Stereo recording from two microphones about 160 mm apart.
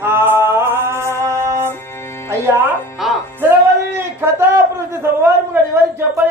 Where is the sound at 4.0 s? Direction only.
15° right (ahead or behind).